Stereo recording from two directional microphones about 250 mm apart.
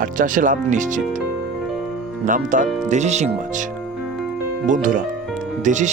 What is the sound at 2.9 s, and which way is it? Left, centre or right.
Speech, right.